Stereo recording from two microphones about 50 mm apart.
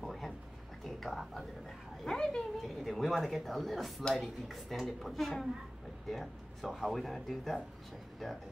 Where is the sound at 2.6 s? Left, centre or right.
Centre.